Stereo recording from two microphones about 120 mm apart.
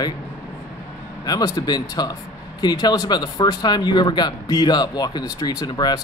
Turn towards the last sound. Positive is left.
turn(degrees=35)  # may be behind; listen again after turning